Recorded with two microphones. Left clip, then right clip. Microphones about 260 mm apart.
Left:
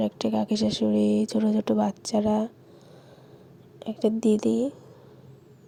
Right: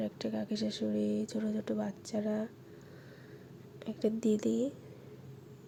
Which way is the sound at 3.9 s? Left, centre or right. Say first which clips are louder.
Left 8 dB; left.